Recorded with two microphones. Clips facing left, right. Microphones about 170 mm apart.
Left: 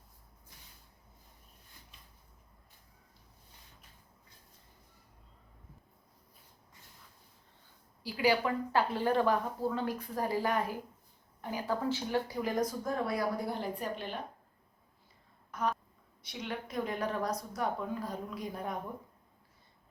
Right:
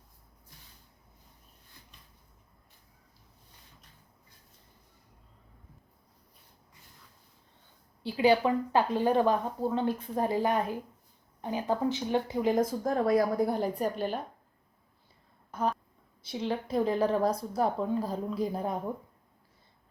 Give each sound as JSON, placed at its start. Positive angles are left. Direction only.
{"t": 8.0, "sound": "speech", "side_deg": -25}
{"t": 13.1, "sound": "speech", "side_deg": -40}
{"t": 15.5, "sound": "a sound", "side_deg": -30}
{"t": 16.2, "sound": "speech", "side_deg": -30}